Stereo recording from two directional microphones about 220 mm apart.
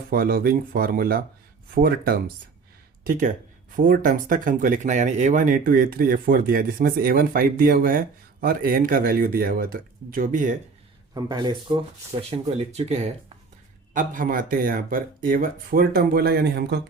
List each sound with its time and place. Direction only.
0.1 s speech: 40° right (ahead or behind)
11.1 s speech: 20° right (ahead or behind); by 16.8 s 50° right (ahead or behind)